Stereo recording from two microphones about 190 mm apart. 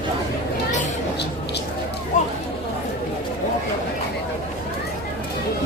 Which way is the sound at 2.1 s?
40° left (ahead or behind).